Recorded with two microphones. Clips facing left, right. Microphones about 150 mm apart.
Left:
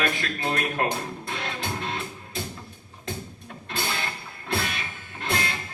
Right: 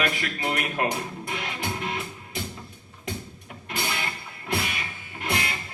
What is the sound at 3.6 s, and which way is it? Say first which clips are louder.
Music: even; 15° right (ahead or behind).